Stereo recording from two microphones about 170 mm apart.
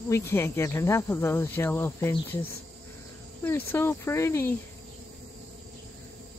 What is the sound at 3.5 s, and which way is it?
Speech, 10° left (ahead or behind).